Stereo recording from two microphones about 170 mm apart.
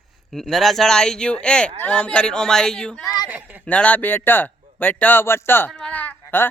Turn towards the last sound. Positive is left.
turn(degrees=10)  # may be behind; listen again after turning